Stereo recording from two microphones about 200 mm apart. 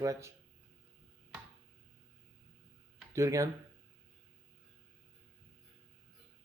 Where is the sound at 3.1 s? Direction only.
15° right (ahead or behind).